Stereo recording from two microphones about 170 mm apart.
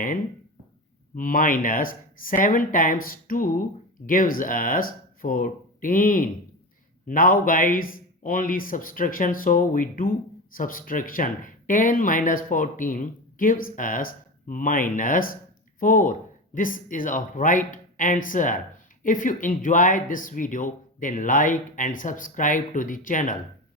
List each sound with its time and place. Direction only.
1.1 s speech: 55° left (ahead or behind)